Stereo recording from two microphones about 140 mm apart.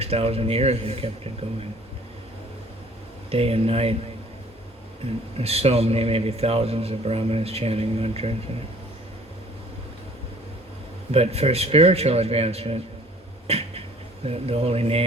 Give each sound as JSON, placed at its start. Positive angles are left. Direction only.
{"t": 0.0, "sound": "a man's voice", "side_deg": -45}
{"t": 3.2, "sound": "a man's voice", "side_deg": -45}
{"t": 5.4, "sound": "a man's voice", "side_deg": -45}
{"t": 11.1, "sound": "a man's voice", "side_deg": -45}
{"t": 13.5, "sound": "a sound", "side_deg": -45}
{"t": 14.3, "sound": "a man's voice", "side_deg": -45}